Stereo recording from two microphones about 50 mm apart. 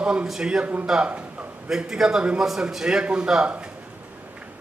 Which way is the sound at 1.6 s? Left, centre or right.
Centre.